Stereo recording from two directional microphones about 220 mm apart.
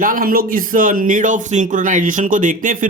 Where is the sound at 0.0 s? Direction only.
40° right (ahead or behind).